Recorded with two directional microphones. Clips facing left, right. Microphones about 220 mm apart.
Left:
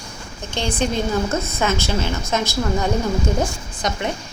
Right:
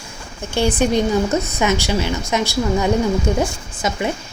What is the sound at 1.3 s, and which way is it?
A woman's voice, 15° right (ahead or behind).